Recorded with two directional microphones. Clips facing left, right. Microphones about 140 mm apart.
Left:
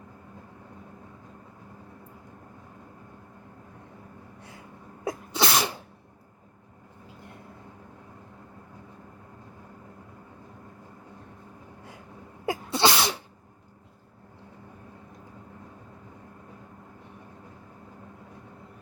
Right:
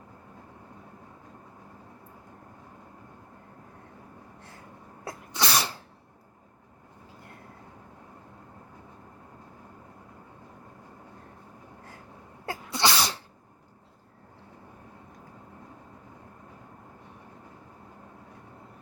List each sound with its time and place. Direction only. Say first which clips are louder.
5.0 s sneeze: left 4 dB; 20° left (ahead or behind)
12.5 s sneeze: left 3 dB; 20° left (ahead or behind)